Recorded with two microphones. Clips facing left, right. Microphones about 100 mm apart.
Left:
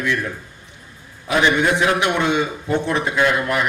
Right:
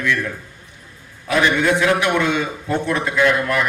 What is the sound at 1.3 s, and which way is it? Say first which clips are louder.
A man's voice: even; 20° left (ahead or behind).